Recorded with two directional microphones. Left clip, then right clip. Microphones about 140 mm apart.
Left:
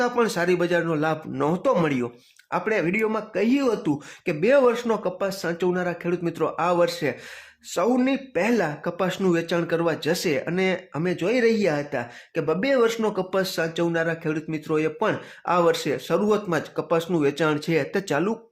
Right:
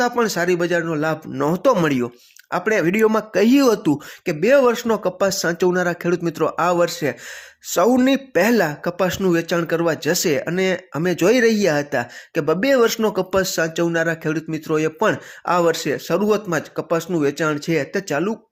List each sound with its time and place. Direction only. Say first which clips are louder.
0.0 s speech: right 3 dB; 20° right (ahead or behind); by 3.9 s 40° right (ahead or behind)
4.3 s speech: right 4 dB; 25° right (ahead or behind)